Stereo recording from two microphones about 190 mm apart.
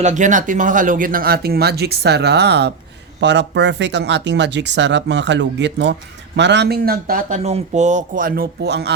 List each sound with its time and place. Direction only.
0.0 s speech: 40° right (ahead or behind); by 8.9 s 60° right (ahead or behind)